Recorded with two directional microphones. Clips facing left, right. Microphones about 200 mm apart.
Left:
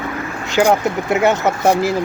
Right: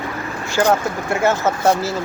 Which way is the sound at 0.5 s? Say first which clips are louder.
Left 3 dB; 15° left (ahead or behind).